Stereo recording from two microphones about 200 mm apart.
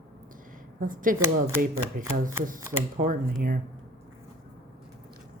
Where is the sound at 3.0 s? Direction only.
40° right (ahead or behind).